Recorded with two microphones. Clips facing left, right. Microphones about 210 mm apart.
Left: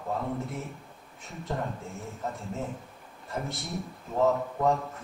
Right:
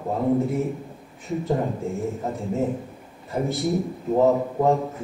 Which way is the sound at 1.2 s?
Centre (ahead or behind).